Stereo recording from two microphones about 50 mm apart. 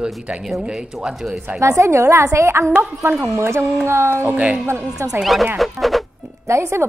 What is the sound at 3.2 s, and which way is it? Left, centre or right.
Music, right.